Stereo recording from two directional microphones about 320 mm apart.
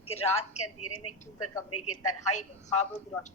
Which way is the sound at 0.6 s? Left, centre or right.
Left.